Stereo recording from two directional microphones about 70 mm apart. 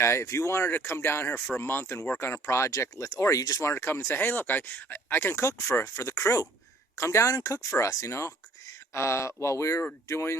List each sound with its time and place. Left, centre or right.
0.0 s speech: left